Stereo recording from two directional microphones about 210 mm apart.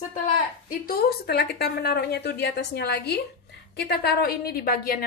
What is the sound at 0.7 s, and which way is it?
A woman's voice, 45° left (ahead or behind).